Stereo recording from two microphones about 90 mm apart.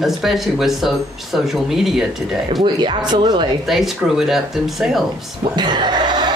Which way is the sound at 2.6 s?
60° right (ahead or behind).